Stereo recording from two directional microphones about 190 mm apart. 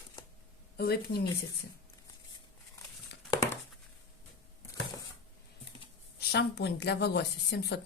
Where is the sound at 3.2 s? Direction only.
15° left (ahead or behind).